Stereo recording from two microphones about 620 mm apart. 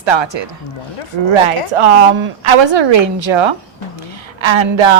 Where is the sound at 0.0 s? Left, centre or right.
Right.